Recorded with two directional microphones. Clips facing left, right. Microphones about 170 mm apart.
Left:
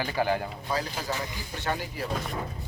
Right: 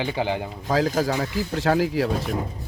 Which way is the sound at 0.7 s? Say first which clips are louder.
Right 10 dB; 90° right.